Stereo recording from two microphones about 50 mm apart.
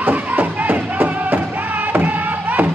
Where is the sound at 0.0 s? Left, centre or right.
Right.